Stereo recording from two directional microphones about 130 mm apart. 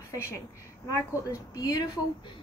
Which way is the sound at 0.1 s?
25° left (ahead or behind).